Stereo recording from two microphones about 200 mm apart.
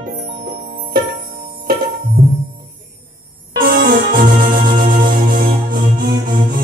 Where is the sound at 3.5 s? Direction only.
50° right (ahead or behind).